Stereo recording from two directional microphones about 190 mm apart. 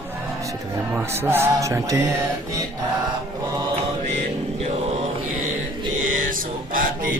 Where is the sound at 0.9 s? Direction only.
15° right (ahead or behind).